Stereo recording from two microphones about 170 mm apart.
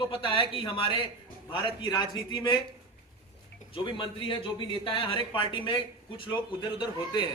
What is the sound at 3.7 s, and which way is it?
A man's voice, 30° left (ahead or behind).